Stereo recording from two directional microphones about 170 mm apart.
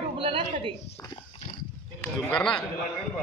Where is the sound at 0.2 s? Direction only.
30° right (ahead or behind).